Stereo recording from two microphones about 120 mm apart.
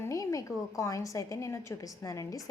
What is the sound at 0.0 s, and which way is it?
A woman's voice, 25° left (ahead or behind).